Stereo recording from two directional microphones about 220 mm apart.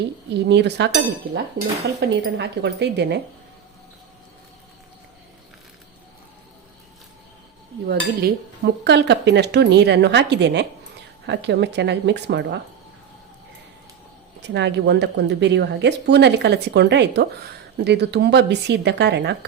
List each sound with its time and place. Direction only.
0.4 s dishes: 50° right (ahead or behind)
7.9 s dishes: 50° right (ahead or behind)
14.4 s dishes: 50° right (ahead or behind)